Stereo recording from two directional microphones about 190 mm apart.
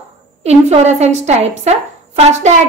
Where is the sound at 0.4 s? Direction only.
35° right (ahead or behind).